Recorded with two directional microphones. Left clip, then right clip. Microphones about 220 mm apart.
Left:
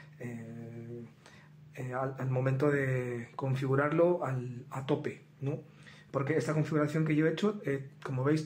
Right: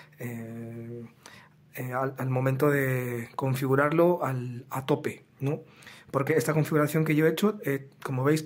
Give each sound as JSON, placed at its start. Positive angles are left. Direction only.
{"t": 0.2, "sound": "mantra", "side_deg": -35}
{"t": 1.8, "sound": "speech", "side_deg": -30}